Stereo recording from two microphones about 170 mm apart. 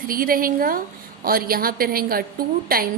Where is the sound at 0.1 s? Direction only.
55° right (ahead or behind).